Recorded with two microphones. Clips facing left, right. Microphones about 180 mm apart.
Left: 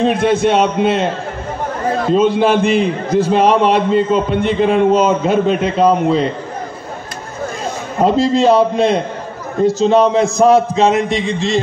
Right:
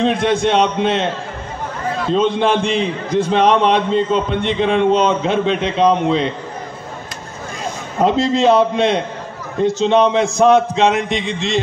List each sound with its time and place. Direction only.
0.0 s a man's voice: 5° left (ahead or behind)
1.9 s a sound: 45° left (ahead or behind)
2.1 s a man's voice: 5° left (ahead or behind)
8.0 s a man's voice: centre (ahead or behind)